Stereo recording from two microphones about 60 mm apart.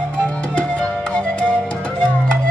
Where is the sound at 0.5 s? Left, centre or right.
Centre.